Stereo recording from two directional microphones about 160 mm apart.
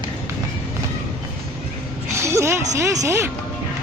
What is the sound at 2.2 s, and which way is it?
Music, 15° right (ahead or behind).